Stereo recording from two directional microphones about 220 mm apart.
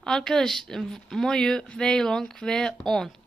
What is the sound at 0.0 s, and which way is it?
Speech, 5° left (ahead or behind).